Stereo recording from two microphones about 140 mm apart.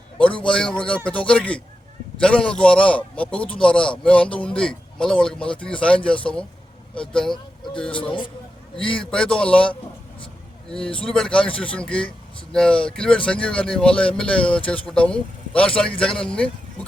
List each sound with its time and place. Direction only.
0.2 s speech: 10° left (ahead or behind)
7.9 s speech: 35° left (ahead or behind)
9.0 s speech: 5° left (ahead or behind)